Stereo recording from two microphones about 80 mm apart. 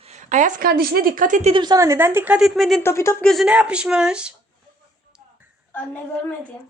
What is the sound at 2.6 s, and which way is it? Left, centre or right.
Speech, centre.